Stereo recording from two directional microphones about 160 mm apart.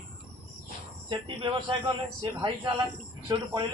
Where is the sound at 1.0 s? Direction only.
30° right (ahead or behind).